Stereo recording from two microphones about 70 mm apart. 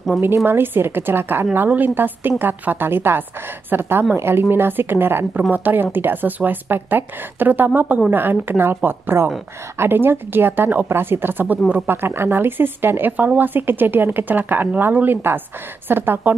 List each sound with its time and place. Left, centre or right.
0.5 s a woman's voice: right